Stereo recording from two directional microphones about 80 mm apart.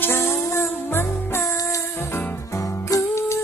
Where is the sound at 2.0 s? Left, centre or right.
Left.